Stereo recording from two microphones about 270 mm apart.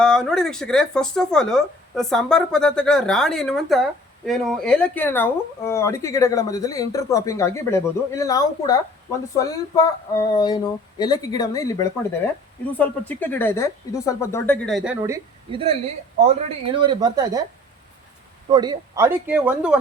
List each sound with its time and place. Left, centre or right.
0.0 s speech: centre
15.0 s a woman's voice: centre
18.5 s speech: centre